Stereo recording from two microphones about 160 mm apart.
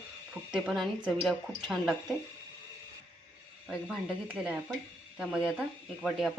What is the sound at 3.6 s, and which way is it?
A woman's voice, 5° right (ahead or behind).